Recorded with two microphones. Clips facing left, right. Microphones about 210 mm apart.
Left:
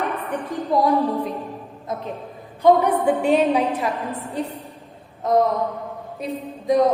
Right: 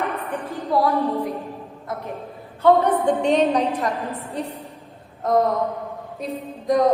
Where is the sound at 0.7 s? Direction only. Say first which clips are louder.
Left 1 dB; 20° left (ahead or behind).